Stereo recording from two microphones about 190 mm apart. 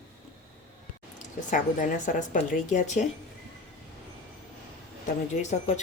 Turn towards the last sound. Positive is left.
turn(degrees=40)  # may be behind; listen again after turning